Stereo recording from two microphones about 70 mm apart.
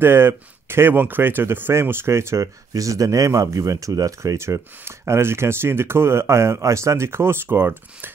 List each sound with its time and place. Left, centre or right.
0.0 s speech: right